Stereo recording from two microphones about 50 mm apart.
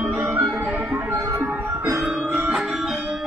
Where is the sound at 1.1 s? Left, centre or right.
Right.